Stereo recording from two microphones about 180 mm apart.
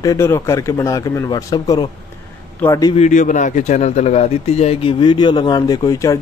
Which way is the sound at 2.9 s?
40° left (ahead or behind).